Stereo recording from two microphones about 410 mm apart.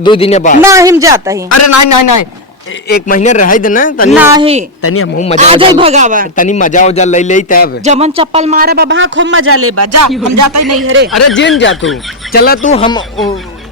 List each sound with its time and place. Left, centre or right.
0.0 s a man's voice: centre
0.6 s speech: centre
1.5 s a man's voice: left
2.9 s a man's voice: centre
4.1 s speech: centre
4.8 s speech: left
5.1 s a man's voice: centre
5.4 s speech: centre
6.3 s a man's voice: centre
7.9 s a man's voice: centre; by 10.8 s right
10.8 s a man's voice: right
11.6 s a man's voice: left